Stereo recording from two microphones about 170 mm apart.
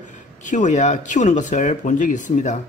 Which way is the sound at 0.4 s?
45° left (ahead or behind).